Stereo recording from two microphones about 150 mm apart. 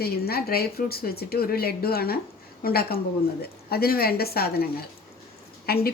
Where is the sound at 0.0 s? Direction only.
90° left.